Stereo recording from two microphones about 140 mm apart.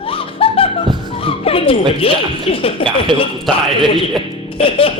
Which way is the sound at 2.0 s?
40° left (ahead or behind).